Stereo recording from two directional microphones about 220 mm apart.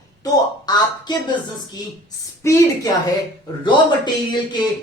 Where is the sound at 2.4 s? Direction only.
15° left (ahead or behind).